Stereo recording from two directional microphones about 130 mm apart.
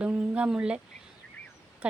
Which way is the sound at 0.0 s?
10° right (ahead or behind).